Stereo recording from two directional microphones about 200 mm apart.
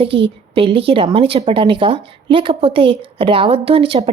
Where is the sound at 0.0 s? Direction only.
25° right (ahead or behind).